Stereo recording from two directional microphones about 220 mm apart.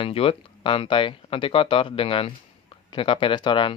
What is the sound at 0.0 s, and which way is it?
Speech, 25° left (ahead or behind).